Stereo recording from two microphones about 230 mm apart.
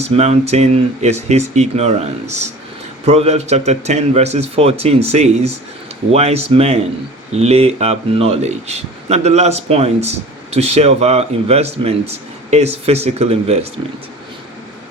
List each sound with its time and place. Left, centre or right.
0.0 s speech: right